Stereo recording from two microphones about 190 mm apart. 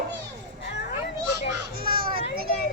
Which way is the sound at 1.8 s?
50° right (ahead or behind).